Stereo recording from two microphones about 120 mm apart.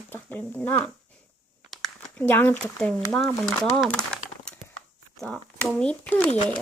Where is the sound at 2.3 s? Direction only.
15° left (ahead or behind).